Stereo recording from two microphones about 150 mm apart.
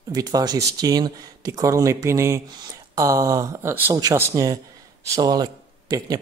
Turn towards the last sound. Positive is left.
turn(degrees=-25)  # may be behind; listen again after turning